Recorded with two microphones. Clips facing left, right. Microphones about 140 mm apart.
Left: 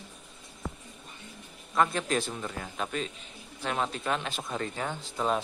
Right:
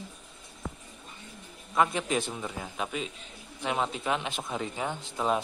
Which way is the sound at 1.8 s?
10° right (ahead or behind).